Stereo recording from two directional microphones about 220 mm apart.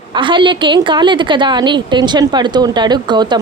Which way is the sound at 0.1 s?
20° right (ahead or behind).